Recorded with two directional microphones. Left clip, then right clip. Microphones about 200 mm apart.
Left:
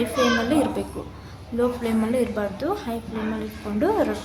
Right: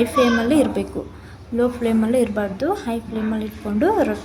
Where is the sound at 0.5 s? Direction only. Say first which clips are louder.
Right 4 dB; 15° right (ahead or behind).